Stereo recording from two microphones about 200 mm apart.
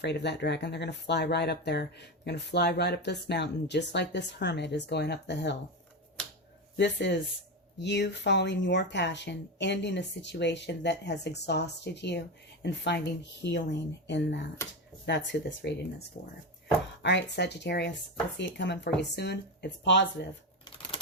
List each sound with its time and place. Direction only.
0.0 s speech: 55° left (ahead or behind)
6.7 s speech: 60° left (ahead or behind)
16.1 s speech: 45° left (ahead or behind)
17.0 s speech: 60° left (ahead or behind)
20.7 s typewriter: 25° left (ahead or behind)